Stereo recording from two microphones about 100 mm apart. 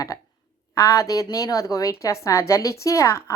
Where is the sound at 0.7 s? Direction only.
30° left (ahead or behind).